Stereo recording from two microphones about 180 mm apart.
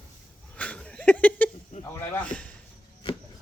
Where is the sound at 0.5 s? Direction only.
5° left (ahead or behind).